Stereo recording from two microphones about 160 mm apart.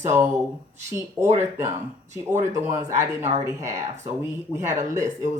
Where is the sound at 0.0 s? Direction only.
15° right (ahead or behind).